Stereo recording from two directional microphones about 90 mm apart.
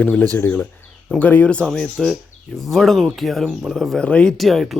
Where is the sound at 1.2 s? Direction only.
15° left (ahead or behind).